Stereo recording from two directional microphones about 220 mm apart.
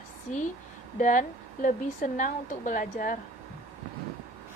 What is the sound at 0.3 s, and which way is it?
A woman's voice, 35° left (ahead or behind).